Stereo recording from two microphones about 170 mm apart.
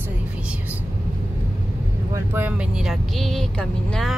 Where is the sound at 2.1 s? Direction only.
10° right (ahead or behind).